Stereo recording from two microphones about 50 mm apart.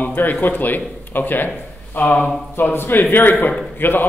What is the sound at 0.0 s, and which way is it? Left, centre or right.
A man's voice, left.